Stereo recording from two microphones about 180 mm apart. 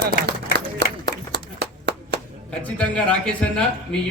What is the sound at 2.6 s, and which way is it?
Speech, 5° left (ahead or behind).